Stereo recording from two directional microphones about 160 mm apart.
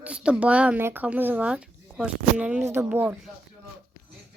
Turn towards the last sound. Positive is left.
turn(degrees=-10)  # may be behind; listen again after turning